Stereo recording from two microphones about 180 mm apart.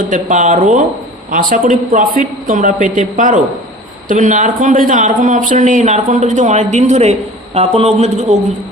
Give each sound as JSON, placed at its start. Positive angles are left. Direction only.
{"t": 0.0, "sound": "speech", "side_deg": -45}